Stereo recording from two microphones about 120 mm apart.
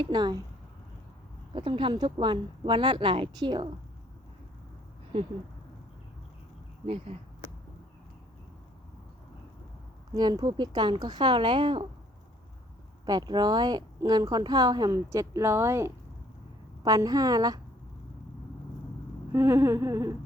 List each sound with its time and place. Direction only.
0.0 s a woman's voice: 35° right (ahead or behind)
1.5 s speech: 45° right (ahead or behind)
6.8 s speech: 55° right (ahead or behind)
10.2 s a woman's voice: 35° right (ahead or behind)
13.1 s a woman's voice: 35° right (ahead or behind)
19.3 s humming: 25° right (ahead or behind)